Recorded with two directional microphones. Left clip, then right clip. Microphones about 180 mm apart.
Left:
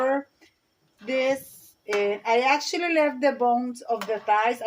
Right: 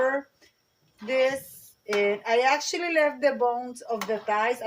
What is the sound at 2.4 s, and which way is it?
Speech, 40° left (ahead or behind).